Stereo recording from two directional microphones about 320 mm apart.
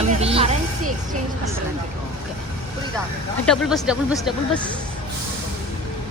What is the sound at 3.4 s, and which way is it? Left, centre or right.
Speech, centre.